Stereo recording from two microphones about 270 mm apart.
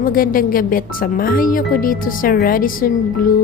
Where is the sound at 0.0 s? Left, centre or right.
Left.